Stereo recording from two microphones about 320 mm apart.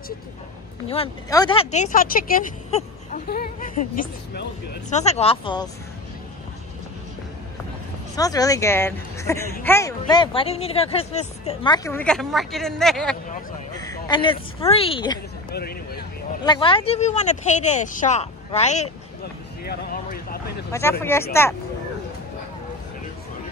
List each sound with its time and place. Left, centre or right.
0.8 s speech: centre
8.2 s speech: centre
15.5 s speech: left
16.4 s speech: centre
21.0 s speech: centre